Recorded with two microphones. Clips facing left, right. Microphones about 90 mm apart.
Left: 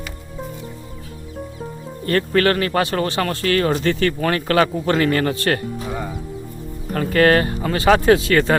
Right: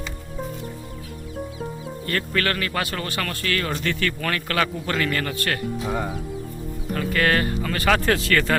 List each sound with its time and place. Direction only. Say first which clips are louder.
2.0 s speech: left 8 dB; 35° left (ahead or behind)
6.9 s speech: left 7 dB; 35° left (ahead or behind)